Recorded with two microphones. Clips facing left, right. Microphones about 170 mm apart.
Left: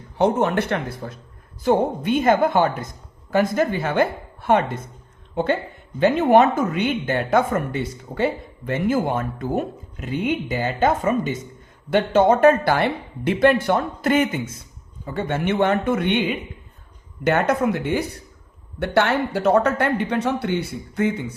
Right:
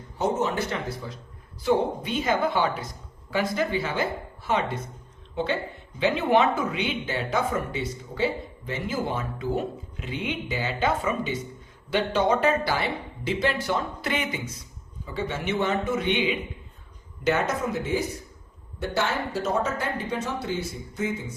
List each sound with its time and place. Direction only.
0.2 s speech: 65° left (ahead or behind)